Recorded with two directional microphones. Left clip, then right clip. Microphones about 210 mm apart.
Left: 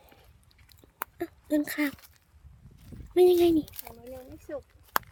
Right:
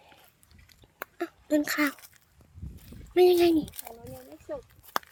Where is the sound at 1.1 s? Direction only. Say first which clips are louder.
Right 2 dB; 10° left (ahead or behind).